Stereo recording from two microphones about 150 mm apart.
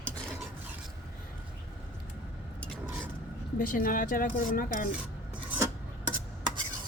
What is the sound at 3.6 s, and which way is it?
Speech, 70° left (ahead or behind).